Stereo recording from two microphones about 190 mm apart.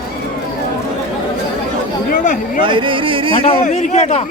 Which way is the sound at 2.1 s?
45° left (ahead or behind).